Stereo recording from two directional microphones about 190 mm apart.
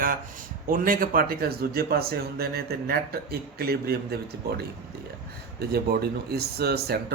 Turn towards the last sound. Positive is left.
turn(degrees=-55)  # may be behind; listen again after turning